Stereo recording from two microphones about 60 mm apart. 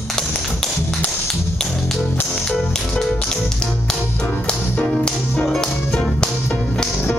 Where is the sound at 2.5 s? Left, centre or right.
Centre.